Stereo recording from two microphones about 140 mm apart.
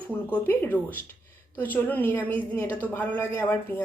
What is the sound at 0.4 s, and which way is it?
Speech, 15° left (ahead or behind).